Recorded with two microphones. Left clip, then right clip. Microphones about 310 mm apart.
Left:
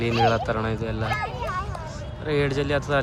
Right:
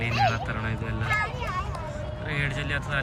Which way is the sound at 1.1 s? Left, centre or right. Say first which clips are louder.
Right 3 dB; left.